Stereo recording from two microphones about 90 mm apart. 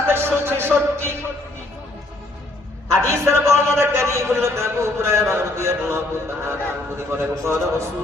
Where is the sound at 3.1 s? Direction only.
30° right (ahead or behind).